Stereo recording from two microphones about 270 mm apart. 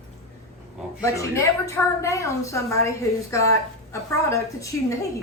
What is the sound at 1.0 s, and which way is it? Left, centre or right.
A woman's voice, centre.